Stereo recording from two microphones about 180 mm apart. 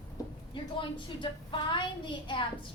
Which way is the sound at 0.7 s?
30° left (ahead or behind).